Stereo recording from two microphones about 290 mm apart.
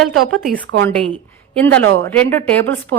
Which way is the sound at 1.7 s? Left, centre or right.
Right.